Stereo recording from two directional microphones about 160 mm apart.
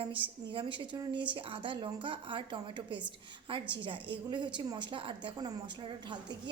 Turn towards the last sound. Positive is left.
turn(degrees=-30)  # may be behind; listen again after turning